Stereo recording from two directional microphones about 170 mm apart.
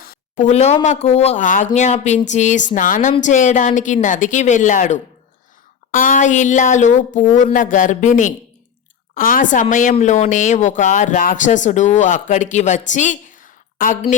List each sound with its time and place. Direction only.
0.0 s speech: 50° left (ahead or behind)